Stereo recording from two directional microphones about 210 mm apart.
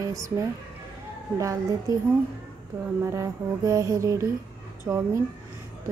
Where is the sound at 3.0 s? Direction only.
15° right (ahead or behind).